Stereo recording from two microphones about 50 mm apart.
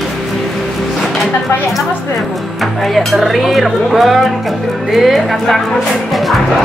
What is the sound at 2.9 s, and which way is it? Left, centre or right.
Speech, centre.